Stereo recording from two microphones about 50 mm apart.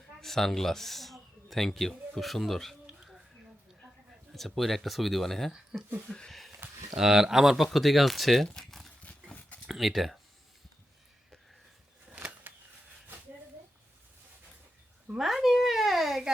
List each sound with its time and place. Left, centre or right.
0.2 s speech: centre
4.3 s speech: centre
5.7 s speech: right
6.1 s speech: centre
6.9 s speech: centre
8.5 s a sound: centre
9.6 s speech: centre
12.1 s a sound: right
15.2 s a sound: centre